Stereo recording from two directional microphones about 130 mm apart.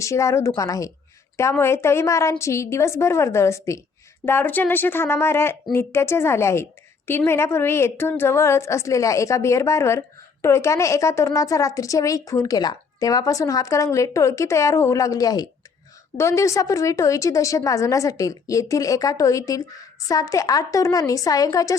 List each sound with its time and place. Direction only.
0.0 s a woman's voice: 25° left (ahead or behind)